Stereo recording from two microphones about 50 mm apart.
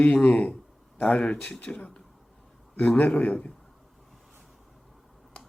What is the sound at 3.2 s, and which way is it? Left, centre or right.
Speech, left.